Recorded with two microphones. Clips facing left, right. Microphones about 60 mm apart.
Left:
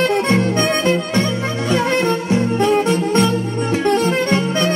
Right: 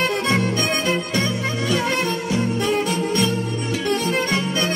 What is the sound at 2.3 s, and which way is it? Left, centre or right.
Music, left.